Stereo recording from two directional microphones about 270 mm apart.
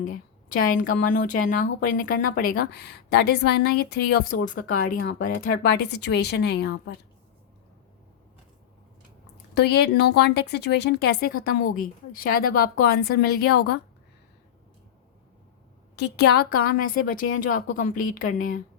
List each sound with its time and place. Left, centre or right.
0.0 s speech: left
9.6 s speech: left
16.0 s speech: left